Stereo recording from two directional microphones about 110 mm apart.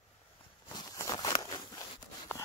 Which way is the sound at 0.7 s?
35° left (ahead or behind).